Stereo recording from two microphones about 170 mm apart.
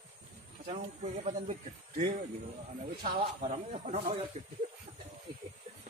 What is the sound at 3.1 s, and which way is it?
Speech, 40° right (ahead or behind).